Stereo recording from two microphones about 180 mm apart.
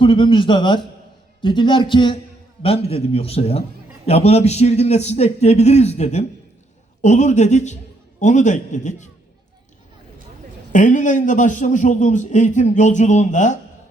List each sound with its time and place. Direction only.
0.0 s a man's voice: 30° left (ahead or behind)
10.7 s a man's voice: 45° left (ahead or behind)